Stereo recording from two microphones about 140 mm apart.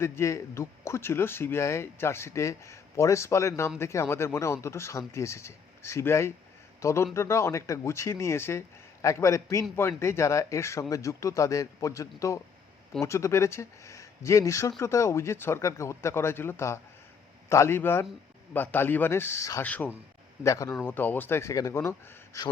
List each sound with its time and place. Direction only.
0.0 s speech: 20° left (ahead or behind)
20.4 s speech: 20° left (ahead or behind)